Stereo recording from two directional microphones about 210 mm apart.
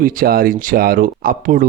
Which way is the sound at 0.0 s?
40° right (ahead or behind).